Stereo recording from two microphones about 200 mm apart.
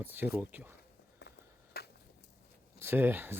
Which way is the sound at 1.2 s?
55° left (ahead or behind).